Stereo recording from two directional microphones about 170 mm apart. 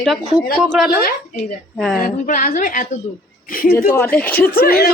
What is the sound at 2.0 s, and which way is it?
Speech, 55° left (ahead or behind).